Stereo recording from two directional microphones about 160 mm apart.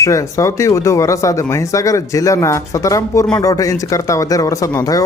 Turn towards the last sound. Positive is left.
turn(degrees=20)  # may be behind; listen again after turning